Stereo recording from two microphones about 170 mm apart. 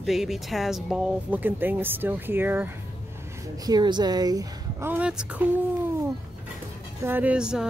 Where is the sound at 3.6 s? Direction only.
25° right (ahead or behind); by 5.5 s 5° right (ahead or behind).